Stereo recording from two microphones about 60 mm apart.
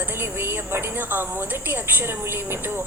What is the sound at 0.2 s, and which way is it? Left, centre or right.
A woman's voice, right.